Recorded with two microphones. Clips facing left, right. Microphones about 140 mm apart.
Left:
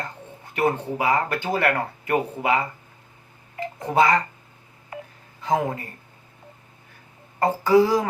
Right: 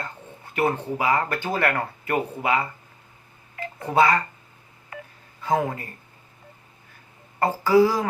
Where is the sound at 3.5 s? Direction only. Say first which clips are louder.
Even; 15° left (ahead or behind).